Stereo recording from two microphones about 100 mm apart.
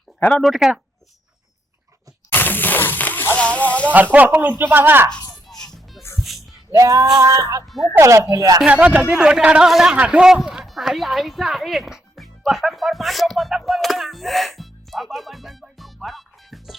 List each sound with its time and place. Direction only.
0.2 s speech: 15° left (ahead or behind)
0.4 s speech: 5° right (ahead or behind)
2.3 s a sound: 20° left (ahead or behind)
3.8 s speech: 15° right (ahead or behind)
6.1 s music: centre (ahead or behind)
6.7 s a sound: 35° right (ahead or behind)
8.6 s a man's voice: 15° right (ahead or behind)